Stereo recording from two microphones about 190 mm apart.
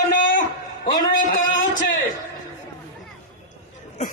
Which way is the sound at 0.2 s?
45° left (ahead or behind).